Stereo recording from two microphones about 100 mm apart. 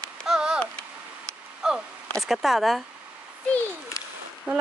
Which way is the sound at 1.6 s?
5° right (ahead or behind).